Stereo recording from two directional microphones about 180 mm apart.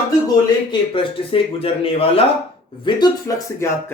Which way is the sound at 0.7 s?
30° left (ahead or behind).